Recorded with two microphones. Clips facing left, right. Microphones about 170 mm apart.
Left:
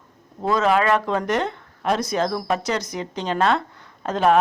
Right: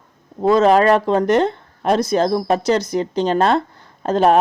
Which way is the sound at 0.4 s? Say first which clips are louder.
Right 7 dB; 30° right (ahead or behind).